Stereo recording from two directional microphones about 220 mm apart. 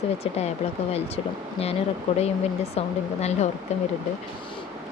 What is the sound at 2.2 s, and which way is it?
Speech, 30° left (ahead or behind).